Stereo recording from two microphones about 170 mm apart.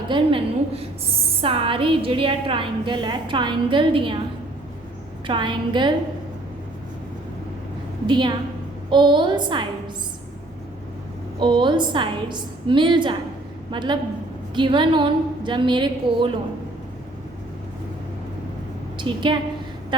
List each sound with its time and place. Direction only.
0.1 s a woman's voice: 30° right (ahead or behind)
5.2 s a woman's voice: 30° right (ahead or behind)
8.0 s a woman's voice: 25° right (ahead or behind)
11.3 s a woman's voice: 30° right (ahead or behind)
18.9 s a woman's voice: 30° right (ahead or behind)